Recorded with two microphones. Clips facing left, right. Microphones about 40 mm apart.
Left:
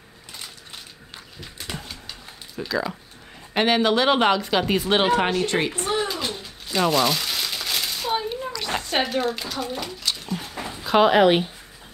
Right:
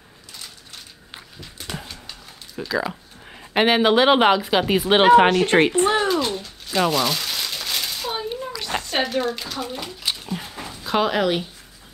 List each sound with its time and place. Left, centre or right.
1.9 s a sound: centre
2.7 s speech: centre; by 5.3 s right
5.3 s speech: right
6.0 s a sound: centre
6.7 s crumpling: centre
8.7 s speech: centre
10.2 s dog: centre
10.5 s dog: centre
11.0 s speech: centre